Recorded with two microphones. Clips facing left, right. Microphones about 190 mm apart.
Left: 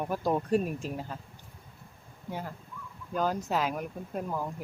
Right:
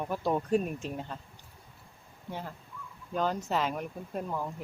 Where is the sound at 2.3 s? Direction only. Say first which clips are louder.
Left 2 dB; 10° left (ahead or behind).